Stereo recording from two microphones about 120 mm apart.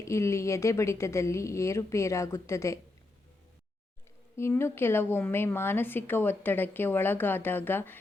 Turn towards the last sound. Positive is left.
turn(degrees=15)  # may be behind; listen again after turning